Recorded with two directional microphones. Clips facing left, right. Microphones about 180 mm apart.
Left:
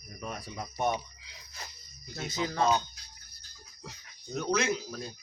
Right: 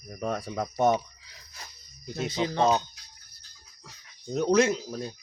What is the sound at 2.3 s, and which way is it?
Speech, 25° right (ahead or behind).